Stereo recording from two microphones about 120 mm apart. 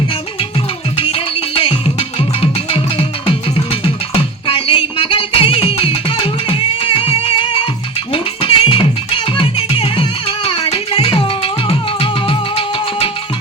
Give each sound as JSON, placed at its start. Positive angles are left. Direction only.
{"t": 0.9, "sound": "music", "side_deg": 50}